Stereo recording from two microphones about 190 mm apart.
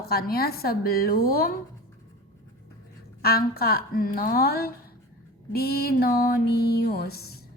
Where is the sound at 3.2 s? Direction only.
55° left (ahead or behind).